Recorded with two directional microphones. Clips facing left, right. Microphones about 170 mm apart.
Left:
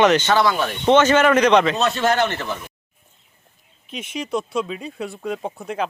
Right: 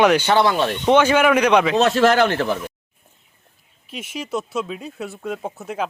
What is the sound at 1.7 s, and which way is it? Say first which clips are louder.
Speech: right 4 dB; 90° right.